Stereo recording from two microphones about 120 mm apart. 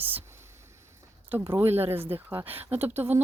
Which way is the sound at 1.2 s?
20° right (ahead or behind).